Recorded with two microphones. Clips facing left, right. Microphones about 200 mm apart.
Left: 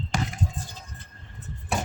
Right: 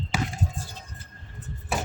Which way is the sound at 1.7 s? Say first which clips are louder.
Left 1 dB; centre (ahead or behind).